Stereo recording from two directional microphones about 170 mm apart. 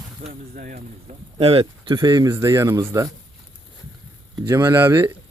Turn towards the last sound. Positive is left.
turn(degrees=-15)  # may be behind; listen again after turning